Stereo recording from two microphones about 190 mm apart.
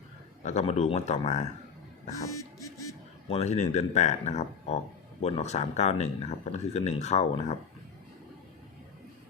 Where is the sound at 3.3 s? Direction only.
35° left (ahead or behind).